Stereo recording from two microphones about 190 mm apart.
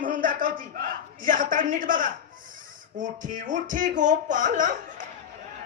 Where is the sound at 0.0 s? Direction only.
45° right (ahead or behind).